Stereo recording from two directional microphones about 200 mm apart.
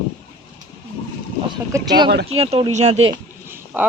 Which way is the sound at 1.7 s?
15° right (ahead or behind).